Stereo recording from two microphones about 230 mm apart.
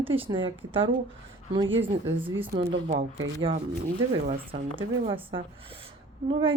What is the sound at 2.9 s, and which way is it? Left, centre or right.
Speech, right.